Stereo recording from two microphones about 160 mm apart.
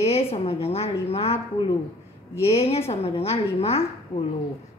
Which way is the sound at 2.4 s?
40° left (ahead or behind).